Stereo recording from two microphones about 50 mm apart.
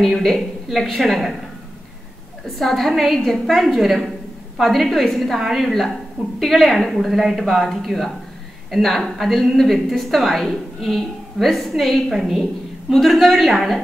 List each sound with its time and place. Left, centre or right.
0.0 s a woman's voice: centre
2.4 s a woman's voice: centre